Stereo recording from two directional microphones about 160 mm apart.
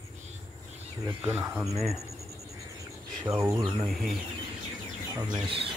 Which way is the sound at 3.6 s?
35° right (ahead or behind).